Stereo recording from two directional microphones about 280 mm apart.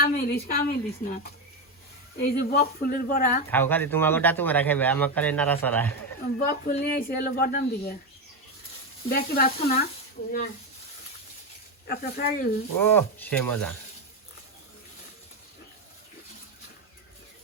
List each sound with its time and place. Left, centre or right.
0.0 s speech: left
3.5 s a man's voice: centre
6.4 s speech: left
9.0 s speech: left
11.9 s speech: left
12.8 s a man's voice: centre